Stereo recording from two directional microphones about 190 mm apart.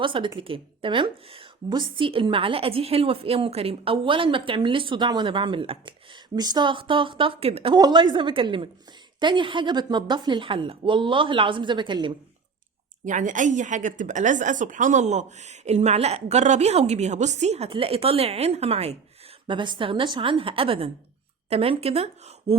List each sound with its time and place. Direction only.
0.0 s a woman's voice: 25° right (ahead or behind)
13.1 s a woman's voice: 40° right (ahead or behind)